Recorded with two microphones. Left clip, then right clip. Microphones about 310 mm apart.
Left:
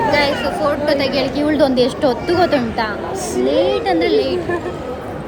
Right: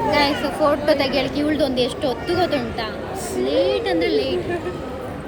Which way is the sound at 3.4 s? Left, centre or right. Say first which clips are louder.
Left 4 dB; centre.